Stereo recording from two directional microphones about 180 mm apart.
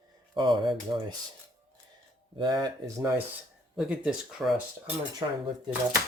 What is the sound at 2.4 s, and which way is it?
Speech, 25° right (ahead or behind).